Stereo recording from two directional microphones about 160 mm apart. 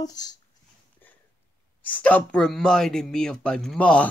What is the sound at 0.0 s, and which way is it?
Speech, 25° left (ahead or behind).